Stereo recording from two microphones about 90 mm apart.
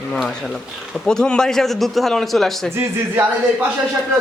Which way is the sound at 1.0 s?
5° left (ahead or behind).